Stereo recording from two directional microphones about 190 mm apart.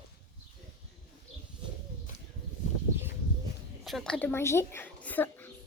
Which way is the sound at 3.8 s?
Centre (ahead or behind).